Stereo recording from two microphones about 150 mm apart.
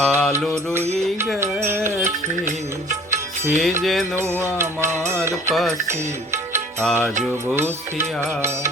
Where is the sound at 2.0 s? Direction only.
55° right (ahead or behind).